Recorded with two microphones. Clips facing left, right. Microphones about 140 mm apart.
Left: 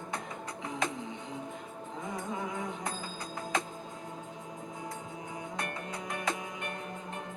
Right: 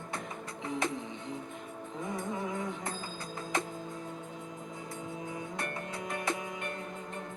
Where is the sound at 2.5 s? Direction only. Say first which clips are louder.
Even; 20° left (ahead or behind).